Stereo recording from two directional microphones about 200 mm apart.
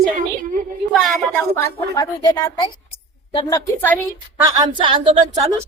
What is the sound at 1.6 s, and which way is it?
A woman's voice, 20° left (ahead or behind).